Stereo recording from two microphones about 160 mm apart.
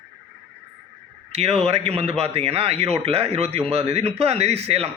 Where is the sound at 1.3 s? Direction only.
40° right (ahead or behind).